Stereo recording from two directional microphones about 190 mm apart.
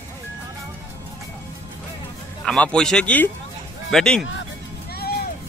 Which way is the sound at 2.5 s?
5° left (ahead or behind).